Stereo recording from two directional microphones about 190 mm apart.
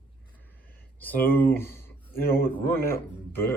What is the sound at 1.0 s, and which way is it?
Speech, 10° left (ahead or behind).